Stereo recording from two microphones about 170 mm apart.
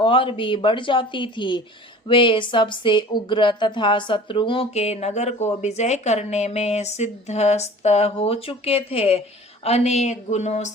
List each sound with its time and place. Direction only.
0.0 s a woman's voice: 30° left (ahead or behind)